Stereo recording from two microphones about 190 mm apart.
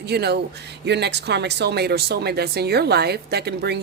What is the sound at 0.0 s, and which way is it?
Speech, 60° right (ahead or behind).